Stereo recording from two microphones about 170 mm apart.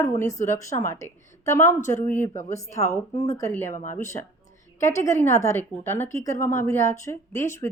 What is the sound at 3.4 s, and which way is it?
Speech, 15° left (ahead or behind).